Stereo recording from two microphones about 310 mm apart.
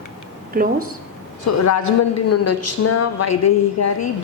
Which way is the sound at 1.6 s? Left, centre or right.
Left.